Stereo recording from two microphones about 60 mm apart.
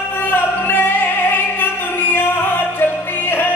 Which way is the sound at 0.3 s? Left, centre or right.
Left.